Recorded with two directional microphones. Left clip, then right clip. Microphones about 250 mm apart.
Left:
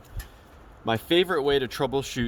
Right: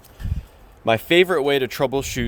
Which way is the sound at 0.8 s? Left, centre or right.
Right.